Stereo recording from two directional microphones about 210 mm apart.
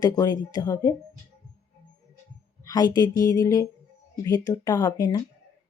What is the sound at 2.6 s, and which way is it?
Speech, 20° left (ahead or behind).